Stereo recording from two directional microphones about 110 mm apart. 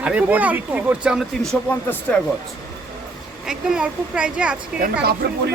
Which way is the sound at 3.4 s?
5° right (ahead or behind).